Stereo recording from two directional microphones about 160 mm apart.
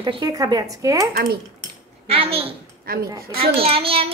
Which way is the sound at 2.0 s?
35° right (ahead or behind).